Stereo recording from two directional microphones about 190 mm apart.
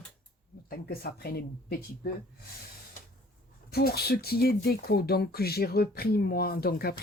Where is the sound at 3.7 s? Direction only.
55° left (ahead or behind).